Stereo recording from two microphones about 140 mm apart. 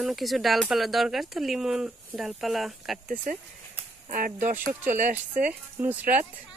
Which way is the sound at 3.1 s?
65° right (ahead or behind).